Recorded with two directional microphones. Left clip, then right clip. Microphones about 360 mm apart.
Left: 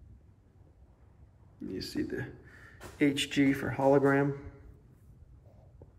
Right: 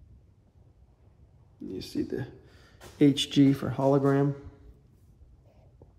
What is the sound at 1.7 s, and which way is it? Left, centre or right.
Speech, centre.